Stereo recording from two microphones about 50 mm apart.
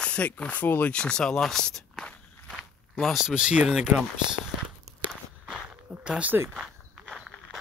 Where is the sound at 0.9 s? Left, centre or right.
Centre.